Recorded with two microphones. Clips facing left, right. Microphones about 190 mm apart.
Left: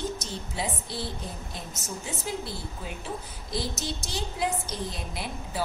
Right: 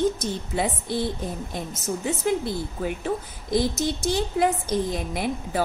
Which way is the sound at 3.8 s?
55° right (ahead or behind).